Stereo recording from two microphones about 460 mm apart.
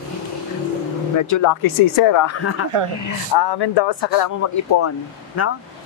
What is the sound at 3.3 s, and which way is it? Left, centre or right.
Speech, left.